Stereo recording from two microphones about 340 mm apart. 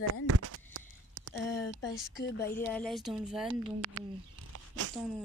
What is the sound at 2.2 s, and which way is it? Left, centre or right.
Speech, left.